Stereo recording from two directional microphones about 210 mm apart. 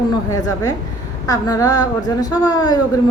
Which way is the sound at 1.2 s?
15° left (ahead or behind).